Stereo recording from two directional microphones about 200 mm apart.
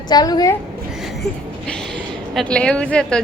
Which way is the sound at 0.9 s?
Centre (ahead or behind).